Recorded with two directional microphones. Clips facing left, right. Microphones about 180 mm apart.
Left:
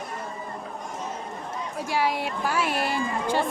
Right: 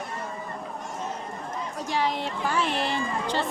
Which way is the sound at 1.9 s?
10° left (ahead or behind).